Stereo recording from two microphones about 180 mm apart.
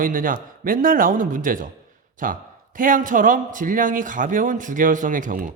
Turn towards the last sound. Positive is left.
turn(degrees=-45)  # may be behind; listen again after turning